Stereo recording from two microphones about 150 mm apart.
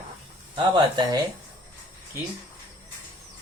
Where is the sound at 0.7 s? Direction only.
30° right (ahead or behind).